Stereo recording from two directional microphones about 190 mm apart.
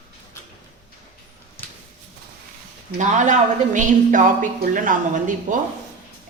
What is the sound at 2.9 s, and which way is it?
Speech, 40° right (ahead or behind).